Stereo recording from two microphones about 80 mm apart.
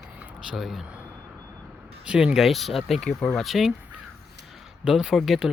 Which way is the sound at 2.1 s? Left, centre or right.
Centre.